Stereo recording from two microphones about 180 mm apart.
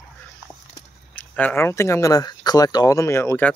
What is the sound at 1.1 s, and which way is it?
Speech, 10° left (ahead or behind).